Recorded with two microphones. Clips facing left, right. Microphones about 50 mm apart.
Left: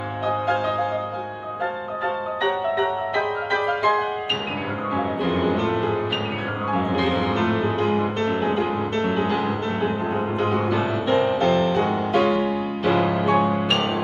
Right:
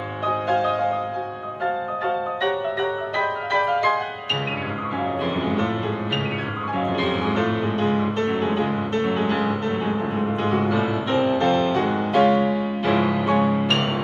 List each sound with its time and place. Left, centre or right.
3.5 s music: centre
10.4 s music: centre